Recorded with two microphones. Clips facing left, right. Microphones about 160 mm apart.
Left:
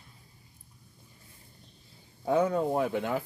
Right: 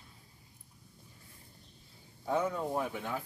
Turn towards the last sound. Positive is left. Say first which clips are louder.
# left 7 dB
turn(degrees=90)